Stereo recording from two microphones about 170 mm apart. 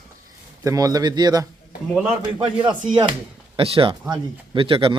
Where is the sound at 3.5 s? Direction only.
35° right (ahead or behind).